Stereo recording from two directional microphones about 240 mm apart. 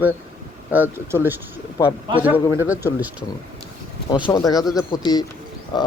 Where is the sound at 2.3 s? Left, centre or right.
Left.